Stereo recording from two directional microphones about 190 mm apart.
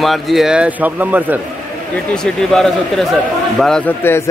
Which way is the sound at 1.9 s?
5° left (ahead or behind).